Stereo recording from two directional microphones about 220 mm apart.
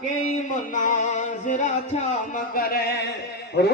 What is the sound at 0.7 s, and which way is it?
Music, 35° left (ahead or behind).